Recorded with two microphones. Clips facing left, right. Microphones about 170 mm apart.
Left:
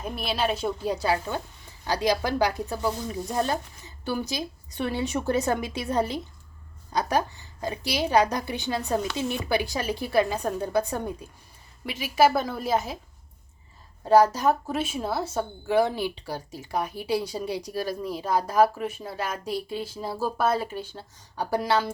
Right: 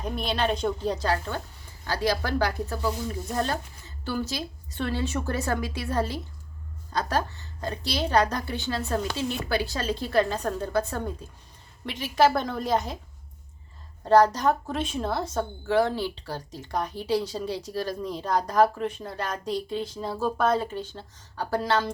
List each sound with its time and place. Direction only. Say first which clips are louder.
0.0 s speech: right 1 dB; 5° left (ahead or behind)
14.0 s a woman's voice: even; 10° left (ahead or behind)